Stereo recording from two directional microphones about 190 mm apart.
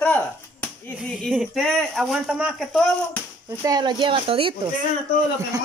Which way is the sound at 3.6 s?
20° right (ahead or behind).